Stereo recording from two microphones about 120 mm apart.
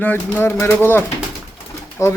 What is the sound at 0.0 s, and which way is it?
Speech, 15° left (ahead or behind).